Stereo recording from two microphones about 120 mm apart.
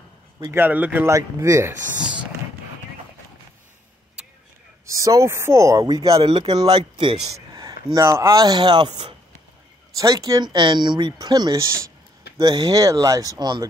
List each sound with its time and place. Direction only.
0.5 s speech: 15° right (ahead or behind)
4.8 s speech: 30° right (ahead or behind)
6.2 s speech: 45° right (ahead or behind)
7.5 s speech: 30° right (ahead or behind)